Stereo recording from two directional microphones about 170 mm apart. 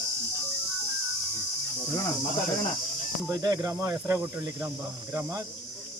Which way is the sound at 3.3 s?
20° right (ahead or behind).